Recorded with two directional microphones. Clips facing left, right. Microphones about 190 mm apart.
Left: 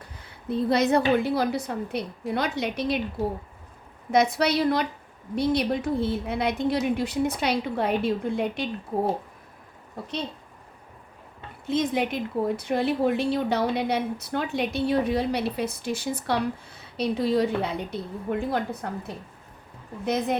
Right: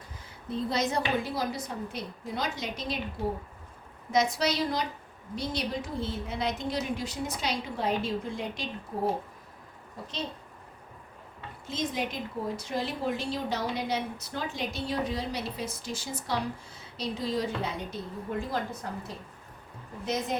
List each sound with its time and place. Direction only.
0.7 s speech: 60° left (ahead or behind)
4.1 s speech: 60° left (ahead or behind)
11.6 s speech: 60° left (ahead or behind)